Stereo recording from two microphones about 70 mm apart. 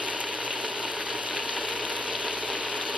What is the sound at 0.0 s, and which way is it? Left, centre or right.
Ratchet, centre.